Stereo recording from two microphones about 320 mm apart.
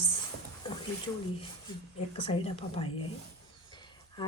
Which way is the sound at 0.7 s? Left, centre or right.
Centre.